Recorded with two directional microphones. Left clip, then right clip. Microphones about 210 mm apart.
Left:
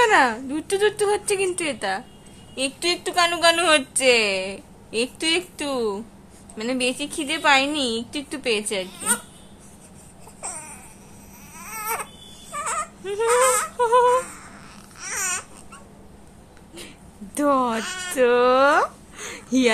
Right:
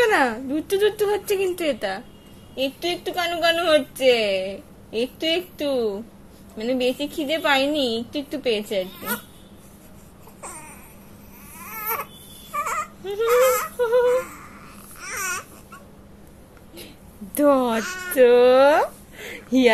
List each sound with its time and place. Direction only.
0.0 s a woman's voice: 10° right (ahead or behind)
10.4 s baby cry: 15° left (ahead or behind)
11.5 s cat: 15° left (ahead or behind)
12.5 s dog: 15° left (ahead or behind)
13.0 s speech: centre (ahead or behind)
13.3 s a sound: 15° left (ahead or behind)
15.0 s babbling: 15° left (ahead or behind)
16.7 s speech: centre (ahead or behind)